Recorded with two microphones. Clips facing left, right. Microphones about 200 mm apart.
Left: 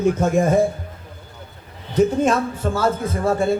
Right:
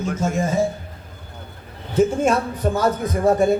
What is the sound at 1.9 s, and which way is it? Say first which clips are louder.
A man's voice: left 1 dB; 10° right (ahead or behind).